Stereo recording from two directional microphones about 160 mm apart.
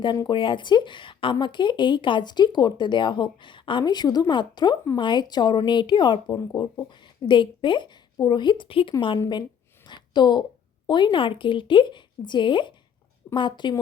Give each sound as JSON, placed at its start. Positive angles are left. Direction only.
{"t": 0.0, "sound": "speech", "side_deg": 30}
{"t": 9.8, "sound": "a sound", "side_deg": 25}
{"t": 10.8, "sound": "speech", "side_deg": 30}